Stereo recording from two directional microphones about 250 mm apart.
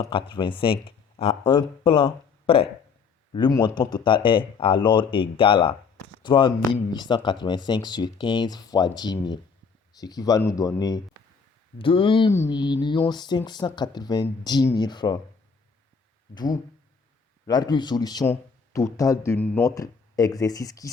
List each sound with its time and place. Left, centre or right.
0.0 s speech: centre
16.3 s speech: centre